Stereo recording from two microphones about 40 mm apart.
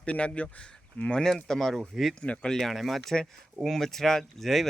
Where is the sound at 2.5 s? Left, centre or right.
Centre.